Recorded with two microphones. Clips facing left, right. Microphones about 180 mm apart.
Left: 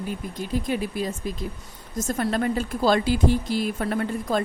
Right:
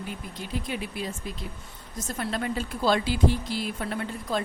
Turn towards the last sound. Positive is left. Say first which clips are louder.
# left 5 dB
turn(degrees=45)  # may be behind; listen again after turning